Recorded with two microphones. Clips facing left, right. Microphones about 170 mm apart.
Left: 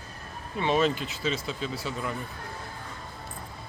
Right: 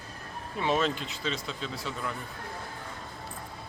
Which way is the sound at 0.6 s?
Centre (ahead or behind).